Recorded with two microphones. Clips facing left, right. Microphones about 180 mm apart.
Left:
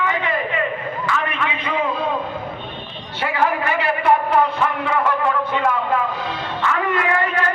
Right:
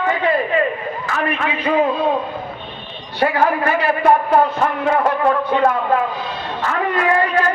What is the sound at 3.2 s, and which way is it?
Speech, 40° right (ahead or behind).